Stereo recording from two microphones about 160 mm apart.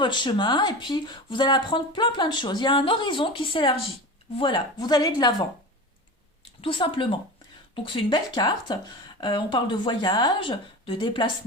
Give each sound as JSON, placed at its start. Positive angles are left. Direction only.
{"t": 0.0, "sound": "speech", "side_deg": 30}
{"t": 6.6, "sound": "speech", "side_deg": 35}